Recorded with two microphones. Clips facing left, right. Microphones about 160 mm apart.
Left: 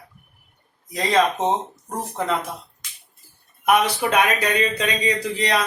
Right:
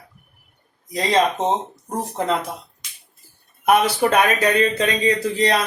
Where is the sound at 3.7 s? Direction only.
35° right (ahead or behind).